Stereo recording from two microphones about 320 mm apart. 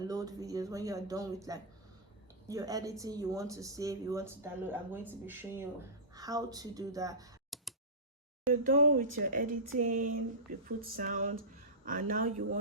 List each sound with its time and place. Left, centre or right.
0.0 s speech: centre
7.5 s a sound: centre
8.4 s speech: right